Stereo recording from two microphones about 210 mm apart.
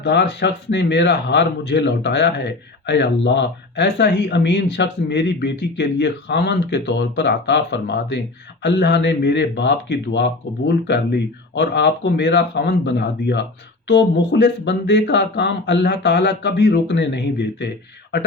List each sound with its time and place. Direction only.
0.0 s a man's voice: 55° left (ahead or behind)